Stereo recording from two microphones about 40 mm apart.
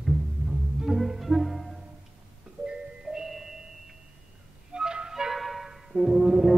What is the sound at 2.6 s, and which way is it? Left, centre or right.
Music, centre.